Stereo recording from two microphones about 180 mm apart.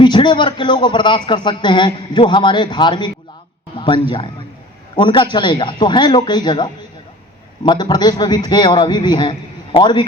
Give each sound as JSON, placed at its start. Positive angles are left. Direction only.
{"t": 0.0, "sound": "a man's voice", "side_deg": 25}